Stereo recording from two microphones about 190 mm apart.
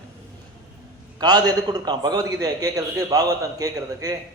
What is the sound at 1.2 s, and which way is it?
A man's voice, 20° right (ahead or behind).